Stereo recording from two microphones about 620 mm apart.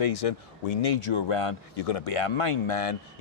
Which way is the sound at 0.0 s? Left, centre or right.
Left.